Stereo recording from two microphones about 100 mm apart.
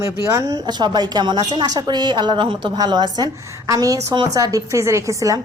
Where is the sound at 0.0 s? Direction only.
35° right (ahead or behind).